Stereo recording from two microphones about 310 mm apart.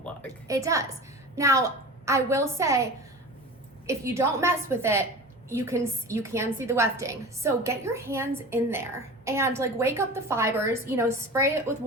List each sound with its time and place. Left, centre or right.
0.4 s a woman's voice: centre
3.8 s a woman's voice: centre